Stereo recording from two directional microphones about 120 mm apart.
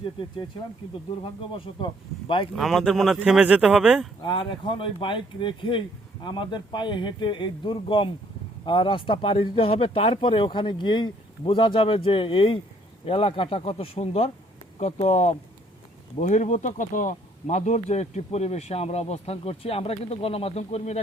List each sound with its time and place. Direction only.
1.2 s speech: 45° left (ahead or behind)
2.6 s speech: centre (ahead or behind)
4.2 s speech: 40° left (ahead or behind)
14.8 s speech: 70° left (ahead or behind)
16.2 s speech: 85° left; by 21.0 s 65° left (ahead or behind)